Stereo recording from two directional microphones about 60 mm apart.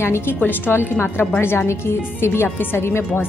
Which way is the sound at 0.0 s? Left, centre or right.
Left.